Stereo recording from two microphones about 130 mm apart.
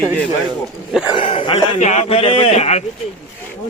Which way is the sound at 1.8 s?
60° left (ahead or behind).